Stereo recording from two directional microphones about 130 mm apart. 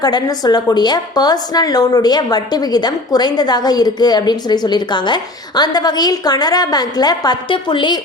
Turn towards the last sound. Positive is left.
turn(degrees=35)  # may be behind; listen again after turning